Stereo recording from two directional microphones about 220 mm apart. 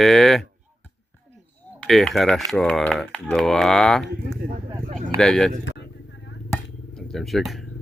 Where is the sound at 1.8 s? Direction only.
Centre (ahead or behind).